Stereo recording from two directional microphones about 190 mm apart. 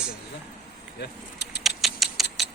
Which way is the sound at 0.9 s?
60° left (ahead or behind).